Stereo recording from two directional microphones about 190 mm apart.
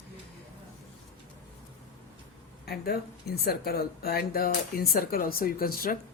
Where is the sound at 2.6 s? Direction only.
55° left (ahead or behind).